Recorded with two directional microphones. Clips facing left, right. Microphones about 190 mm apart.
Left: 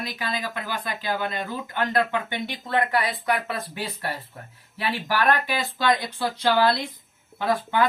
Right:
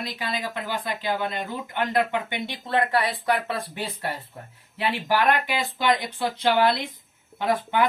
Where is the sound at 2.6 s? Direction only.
25° right (ahead or behind).